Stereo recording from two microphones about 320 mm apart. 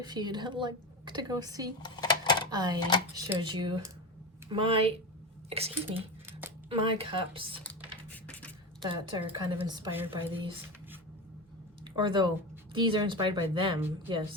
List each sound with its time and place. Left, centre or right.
0.0 s a woman's voice: centre
1.8 s dishes: centre
2.5 s a woman's voice: centre
7.6 s music: centre
8.9 s a woman's voice: centre
11.9 s a woman's voice: centre